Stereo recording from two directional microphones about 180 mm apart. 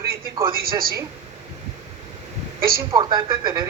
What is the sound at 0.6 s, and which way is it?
Speech, 55° right (ahead or behind).